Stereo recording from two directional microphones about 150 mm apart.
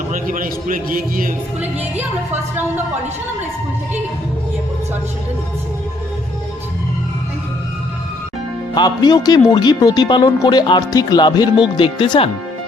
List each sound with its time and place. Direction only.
0.1 s a man's voice: 65° right (ahead or behind)
2.0 s a woman's voice: 15° right (ahead or behind)
8.7 s speech: 30° left (ahead or behind)